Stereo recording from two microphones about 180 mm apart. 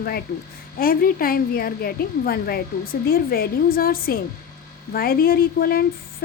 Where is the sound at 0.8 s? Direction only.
55° left (ahead or behind).